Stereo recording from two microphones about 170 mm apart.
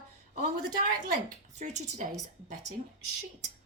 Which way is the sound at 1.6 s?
45° right (ahead or behind).